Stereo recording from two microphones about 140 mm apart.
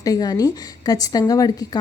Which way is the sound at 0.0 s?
25° left (ahead or behind).